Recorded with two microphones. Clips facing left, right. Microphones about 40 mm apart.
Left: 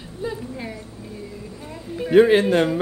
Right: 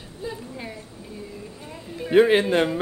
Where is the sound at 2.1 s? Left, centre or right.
Centre.